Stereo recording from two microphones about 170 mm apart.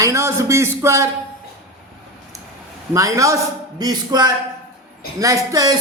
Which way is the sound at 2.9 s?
20° right (ahead or behind).